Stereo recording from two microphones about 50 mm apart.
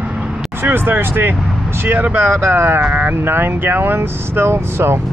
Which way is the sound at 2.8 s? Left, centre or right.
Right.